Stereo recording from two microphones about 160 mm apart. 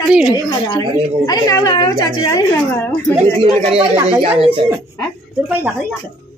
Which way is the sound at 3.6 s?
40° right (ahead or behind).